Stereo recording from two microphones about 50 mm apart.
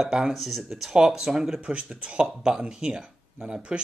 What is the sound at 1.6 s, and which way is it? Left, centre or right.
Speech, right.